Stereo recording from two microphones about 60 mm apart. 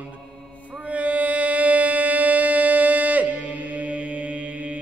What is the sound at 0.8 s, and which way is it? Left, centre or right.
Music, right.